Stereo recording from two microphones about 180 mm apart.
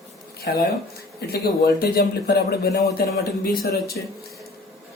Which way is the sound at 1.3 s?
60° left (ahead or behind).